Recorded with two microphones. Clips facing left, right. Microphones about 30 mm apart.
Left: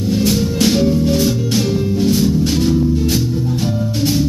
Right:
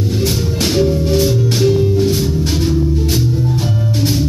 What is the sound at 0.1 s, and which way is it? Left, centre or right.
Music, right.